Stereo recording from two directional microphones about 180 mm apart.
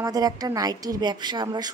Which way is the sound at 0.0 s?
20° right (ahead or behind).